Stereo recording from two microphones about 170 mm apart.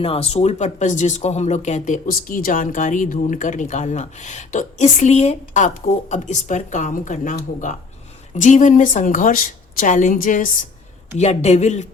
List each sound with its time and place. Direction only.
0.0 s speech: 35° left (ahead or behind); by 10.5 s 50° left (ahead or behind)
11.2 s speech: 40° left (ahead or behind)